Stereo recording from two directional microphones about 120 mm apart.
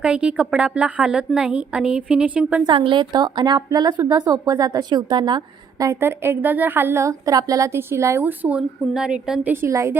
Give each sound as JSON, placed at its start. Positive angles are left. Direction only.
{"t": 0.0, "sound": "a woman's voice", "side_deg": -10}
{"t": 2.6, "sound": "a woman's voice", "side_deg": -45}
{"t": 5.8, "sound": "a woman's voice", "side_deg": -20}
{"t": 9.5, "sound": "a woman's voice", "side_deg": -20}